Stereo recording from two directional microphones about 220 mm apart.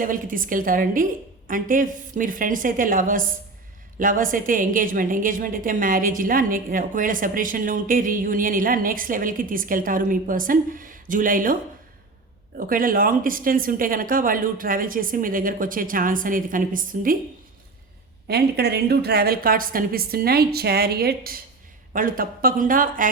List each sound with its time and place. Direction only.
0.0 s a woman's voice: 40° right (ahead or behind)
12.5 s a woman's voice: 40° right (ahead or behind)
18.3 s a woman's voice: 45° right (ahead or behind)